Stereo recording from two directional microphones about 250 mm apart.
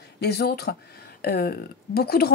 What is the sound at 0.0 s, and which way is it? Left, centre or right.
Speech, left.